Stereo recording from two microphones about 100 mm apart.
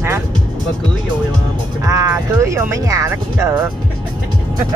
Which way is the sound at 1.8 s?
25° right (ahead or behind).